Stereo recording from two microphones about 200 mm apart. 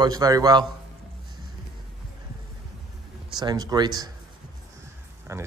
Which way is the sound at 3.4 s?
20° right (ahead or behind).